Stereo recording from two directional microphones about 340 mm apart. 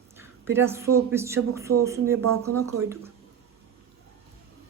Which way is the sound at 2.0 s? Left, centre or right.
Right.